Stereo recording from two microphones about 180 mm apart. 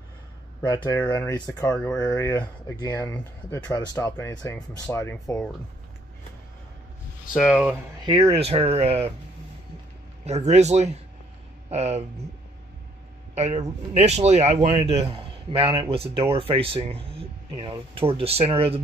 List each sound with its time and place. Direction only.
0.8 s speech: 10° left (ahead or behind)
4.9 s speech: 10° left (ahead or behind)
7.3 s speech: centre (ahead or behind)
8.0 s a man's voice: 25° right (ahead or behind)
10.2 s a man's voice: 40° right (ahead or behind)
13.3 s a man's voice: 40° right (ahead or behind)